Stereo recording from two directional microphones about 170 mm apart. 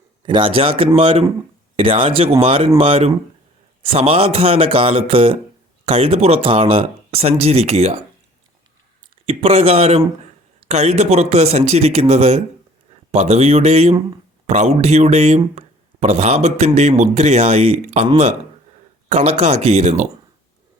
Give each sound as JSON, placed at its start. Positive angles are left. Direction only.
{"t": 0.3, "sound": "speech", "side_deg": -30}
{"t": 9.2, "sound": "speech", "side_deg": -35}